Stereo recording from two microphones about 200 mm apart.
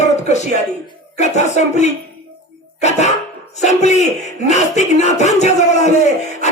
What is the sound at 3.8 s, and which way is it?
Speech, 35° left (ahead or behind).